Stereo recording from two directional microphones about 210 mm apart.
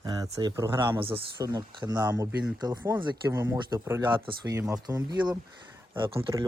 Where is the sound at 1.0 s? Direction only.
25° right (ahead or behind).